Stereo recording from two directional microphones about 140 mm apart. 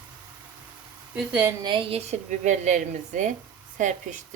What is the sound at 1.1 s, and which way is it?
Speech, 5° right (ahead or behind).